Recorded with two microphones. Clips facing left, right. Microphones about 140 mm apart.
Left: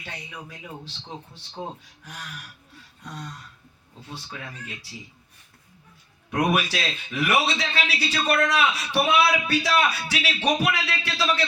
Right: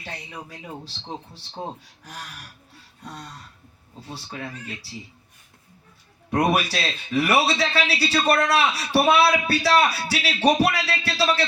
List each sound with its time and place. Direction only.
0.0 s a man's voice: 35° right (ahead or behind)
4.0 s a man's voice: 35° right (ahead or behind)
6.3 s a man's voice: 35° right (ahead or behind)